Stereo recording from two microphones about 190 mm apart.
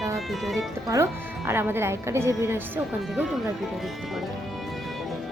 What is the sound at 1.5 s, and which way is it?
Speech, 10° right (ahead or behind).